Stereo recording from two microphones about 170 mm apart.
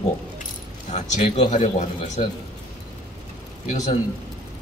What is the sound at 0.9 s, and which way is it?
Speech, 40° left (ahead or behind).